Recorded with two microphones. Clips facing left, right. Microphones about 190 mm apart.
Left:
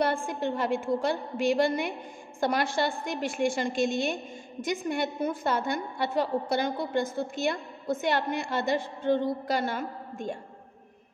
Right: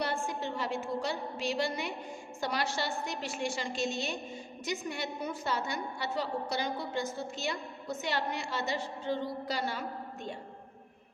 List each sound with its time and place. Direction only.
0.0 s a woman's voice: 55° left (ahead or behind)